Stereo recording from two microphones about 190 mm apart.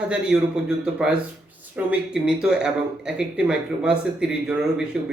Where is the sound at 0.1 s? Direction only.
5° right (ahead or behind).